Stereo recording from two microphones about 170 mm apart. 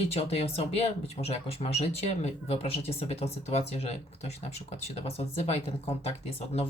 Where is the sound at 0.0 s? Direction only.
35° left (ahead or behind).